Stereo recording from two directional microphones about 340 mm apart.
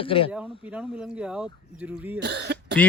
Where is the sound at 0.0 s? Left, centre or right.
Centre.